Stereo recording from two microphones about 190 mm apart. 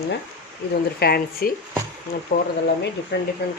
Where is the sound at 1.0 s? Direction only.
55° left (ahead or behind).